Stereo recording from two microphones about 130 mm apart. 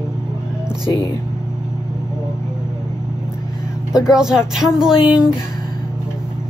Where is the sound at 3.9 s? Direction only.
5° right (ahead or behind).